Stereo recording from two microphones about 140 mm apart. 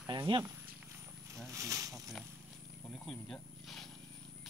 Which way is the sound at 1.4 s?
20° right (ahead or behind).